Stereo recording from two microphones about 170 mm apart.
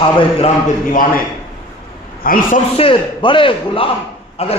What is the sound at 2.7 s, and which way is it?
A man's voice, 30° left (ahead or behind).